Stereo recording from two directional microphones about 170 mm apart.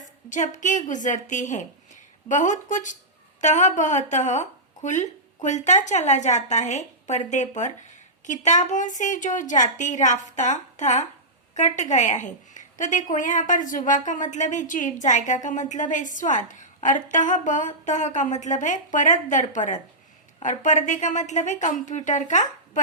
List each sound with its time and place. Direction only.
0.3 s a woman's voice: 45° left (ahead or behind)